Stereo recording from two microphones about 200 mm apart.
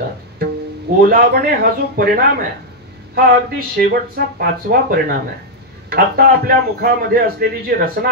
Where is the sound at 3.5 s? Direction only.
45° right (ahead or behind).